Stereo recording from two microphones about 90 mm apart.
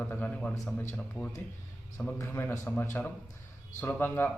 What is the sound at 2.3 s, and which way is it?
A man's voice, 25° left (ahead or behind).